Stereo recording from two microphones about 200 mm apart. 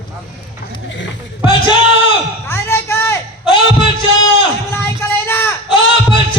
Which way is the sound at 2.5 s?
15° left (ahead or behind).